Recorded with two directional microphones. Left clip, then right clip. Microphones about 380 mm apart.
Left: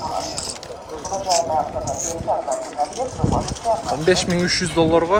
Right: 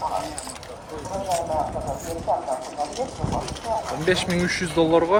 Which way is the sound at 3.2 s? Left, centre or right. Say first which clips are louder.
Left 5 dB; centre.